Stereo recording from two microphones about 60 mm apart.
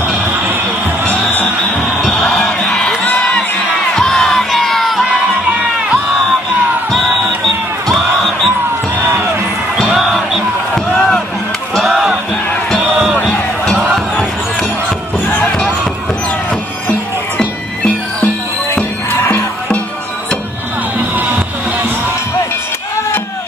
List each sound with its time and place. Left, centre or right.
2.0 s music: centre
3.9 s crowd: centre
7.9 s music: centre
9.8 s music: centre
11.0 s chop: centre
11.9 s music: centre
13.9 s basketball bounce: centre
19.1 s music: left